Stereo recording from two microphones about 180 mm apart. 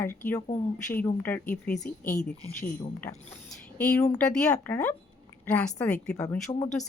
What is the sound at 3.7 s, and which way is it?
A woman's voice, 5° left (ahead or behind).